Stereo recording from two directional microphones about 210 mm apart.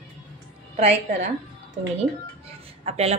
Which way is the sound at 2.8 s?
30° right (ahead or behind).